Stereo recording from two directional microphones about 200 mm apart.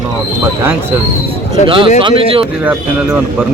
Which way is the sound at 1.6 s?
25° right (ahead or behind).